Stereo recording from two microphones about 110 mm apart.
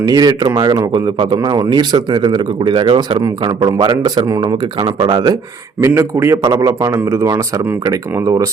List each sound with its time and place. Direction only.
0.1 s speech: 40° right (ahead or behind)
5.8 s a man's voice: 25° right (ahead or behind)